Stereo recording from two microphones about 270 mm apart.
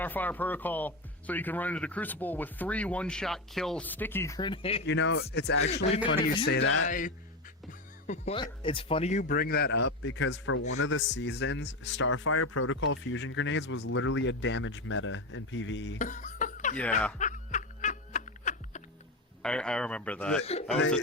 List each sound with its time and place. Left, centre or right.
0.0 s speech: centre
4.9 s speech: left
6.8 s speech: left
16.0 s chuckle: left
17.2 s snicker: left
19.4 s a man's voice: centre
20.4 s speech: left